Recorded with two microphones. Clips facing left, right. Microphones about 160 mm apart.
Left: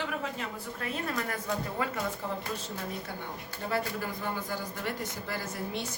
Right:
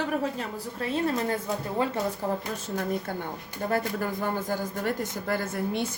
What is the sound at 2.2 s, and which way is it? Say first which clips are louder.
Speech: right 6 dB; 40° right (ahead or behind).